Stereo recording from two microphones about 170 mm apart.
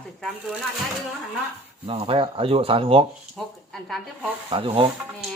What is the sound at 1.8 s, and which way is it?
Speech, 35° right (ahead or behind).